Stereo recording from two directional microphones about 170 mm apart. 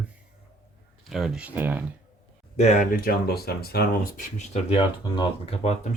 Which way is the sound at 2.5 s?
45° left (ahead or behind).